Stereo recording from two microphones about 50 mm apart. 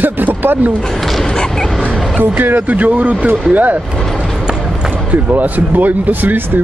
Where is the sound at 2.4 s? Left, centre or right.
Right.